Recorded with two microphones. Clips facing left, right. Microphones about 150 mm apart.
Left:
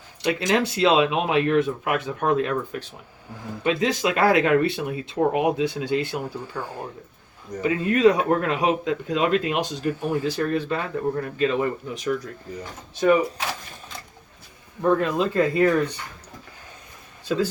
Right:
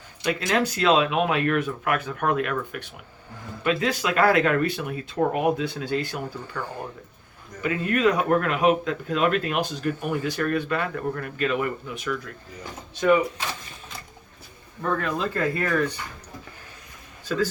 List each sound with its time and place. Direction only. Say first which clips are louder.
0.3 s speech: left 2 dB; 20° left (ahead or behind); by 12.3 s 40° left (ahead or behind)
14.8 s speech: left 5 dB; 20° left (ahead or behind)